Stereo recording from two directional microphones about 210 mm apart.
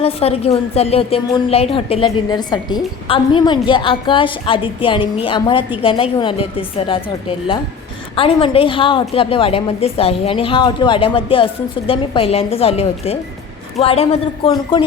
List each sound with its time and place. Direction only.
0.0 s a woman's voice: 30° left (ahead or behind)